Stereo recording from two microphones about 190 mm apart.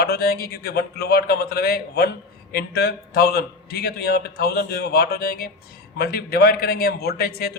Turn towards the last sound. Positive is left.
turn(degrees=55)  # may be behind; listen again after turning